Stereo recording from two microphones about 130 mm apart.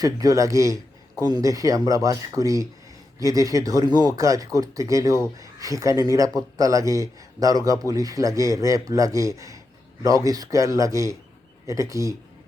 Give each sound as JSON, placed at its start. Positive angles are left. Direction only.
{"t": 0.0, "sound": "speech", "side_deg": -25}